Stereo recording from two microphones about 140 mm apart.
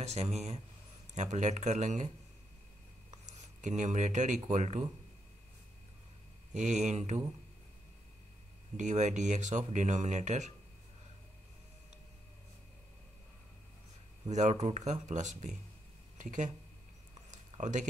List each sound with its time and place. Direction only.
0.0 s speech: 50° right (ahead or behind)
3.1 s speech: 60° right (ahead or behind)
6.5 s speech: 60° right (ahead or behind)
8.7 s speech: 60° right (ahead or behind)
14.3 s speech: 55° right (ahead or behind)
17.3 s a sound: 60° right (ahead or behind)